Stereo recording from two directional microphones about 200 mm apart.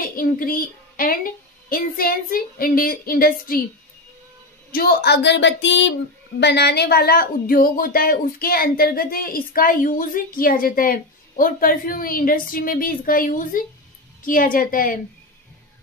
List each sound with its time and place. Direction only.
0.0 s a woman's voice: 45° left (ahead or behind)
4.7 s speech: 50° left (ahead or behind)